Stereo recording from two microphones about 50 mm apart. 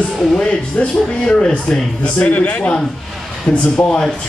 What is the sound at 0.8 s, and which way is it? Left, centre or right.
Speech, left.